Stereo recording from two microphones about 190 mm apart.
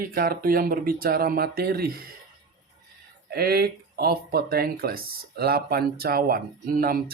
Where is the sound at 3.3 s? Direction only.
55° right (ahead or behind).